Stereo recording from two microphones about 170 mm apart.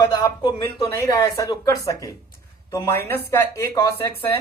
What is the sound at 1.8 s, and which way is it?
Speech, 20° left (ahead or behind).